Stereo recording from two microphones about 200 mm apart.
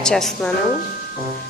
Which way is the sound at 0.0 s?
Centre (ahead or behind).